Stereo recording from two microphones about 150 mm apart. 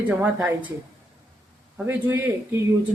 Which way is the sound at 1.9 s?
15° right (ahead or behind).